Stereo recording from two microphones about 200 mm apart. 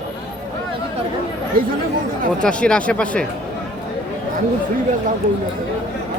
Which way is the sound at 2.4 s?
5° left (ahead or behind).